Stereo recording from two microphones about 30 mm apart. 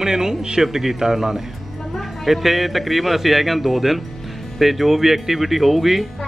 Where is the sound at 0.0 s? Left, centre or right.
Centre.